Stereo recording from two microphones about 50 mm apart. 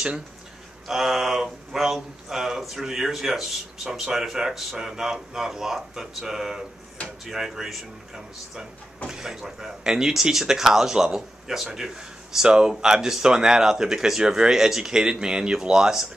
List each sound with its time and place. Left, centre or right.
0.8 s speech: centre